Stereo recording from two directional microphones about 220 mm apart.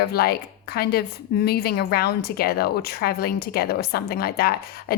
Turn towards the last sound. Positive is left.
turn(degrees=45)  # may be behind; listen again after turning